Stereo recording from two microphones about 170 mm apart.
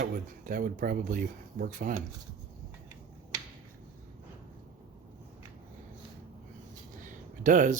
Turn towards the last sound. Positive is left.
turn(degrees=-50)  # may be behind; listen again after turning